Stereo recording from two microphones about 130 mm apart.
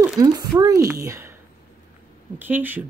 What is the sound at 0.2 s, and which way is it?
Speech, 30° right (ahead or behind).